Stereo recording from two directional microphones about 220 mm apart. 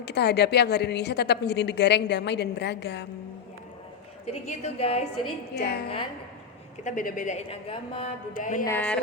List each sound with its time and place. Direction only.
0.0 s a woman's voice: 50° left (ahead or behind)
4.3 s a woman's voice: 30° left (ahead or behind)
5.5 s a woman's voice: 45° left (ahead or behind)
6.8 s a woman's voice: 35° left (ahead or behind)
8.3 s a woman's voice: 35° left (ahead or behind)
8.6 s speech: 10° left (ahead or behind)